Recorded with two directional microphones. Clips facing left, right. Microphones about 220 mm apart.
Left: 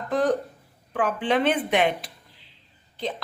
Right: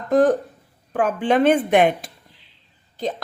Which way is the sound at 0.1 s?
45° right (ahead or behind).